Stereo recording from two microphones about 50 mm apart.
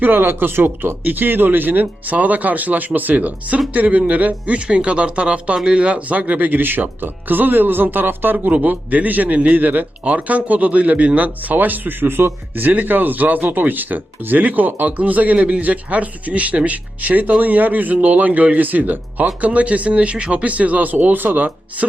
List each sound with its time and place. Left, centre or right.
0.0 s speech: right